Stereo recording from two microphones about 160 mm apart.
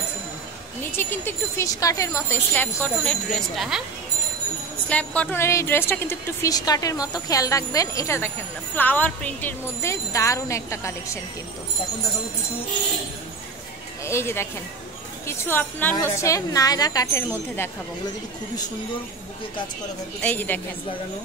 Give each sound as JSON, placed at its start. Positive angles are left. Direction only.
{"t": 0.9, "sound": "speech", "side_deg": 15}
{"t": 4.8, "sound": "a woman's voice", "side_deg": 10}
{"t": 14.0, "sound": "a woman's voice", "side_deg": 15}
{"t": 20.2, "sound": "speech", "side_deg": 10}